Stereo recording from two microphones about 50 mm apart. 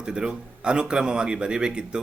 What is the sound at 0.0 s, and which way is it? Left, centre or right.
Speech, centre.